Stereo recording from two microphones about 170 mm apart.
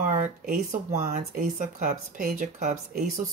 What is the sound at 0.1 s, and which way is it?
Speech, 45° right (ahead or behind).